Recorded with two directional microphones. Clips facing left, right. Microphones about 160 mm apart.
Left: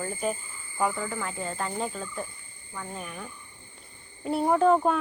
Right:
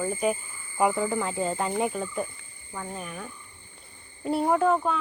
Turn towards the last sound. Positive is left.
turn(degrees=40)  # may be behind; listen again after turning